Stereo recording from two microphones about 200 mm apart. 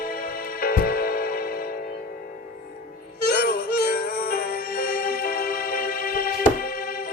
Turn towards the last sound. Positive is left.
turn(degrees=45)  # may be behind; listen again after turning